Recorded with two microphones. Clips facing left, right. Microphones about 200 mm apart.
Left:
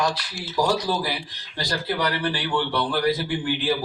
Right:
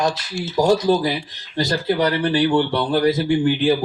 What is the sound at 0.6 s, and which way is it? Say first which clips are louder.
Speech: right 7 dB; 20° right (ahead or behind).